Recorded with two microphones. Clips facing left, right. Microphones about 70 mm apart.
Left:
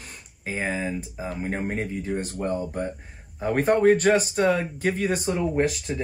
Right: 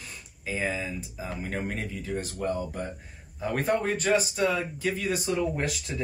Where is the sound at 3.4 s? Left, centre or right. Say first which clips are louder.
Left 7 dB; left.